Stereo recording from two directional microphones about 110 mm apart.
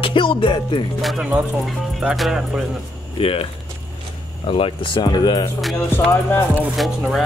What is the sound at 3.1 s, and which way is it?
Speech, 60° left (ahead or behind).